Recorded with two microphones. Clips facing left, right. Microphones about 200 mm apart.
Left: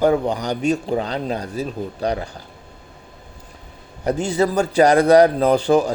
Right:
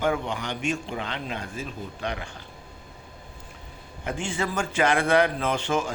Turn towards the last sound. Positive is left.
turn(degrees=35)  # may be behind; listen again after turning